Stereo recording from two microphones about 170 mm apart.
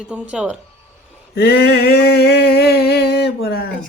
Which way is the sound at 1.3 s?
70° left (ahead or behind).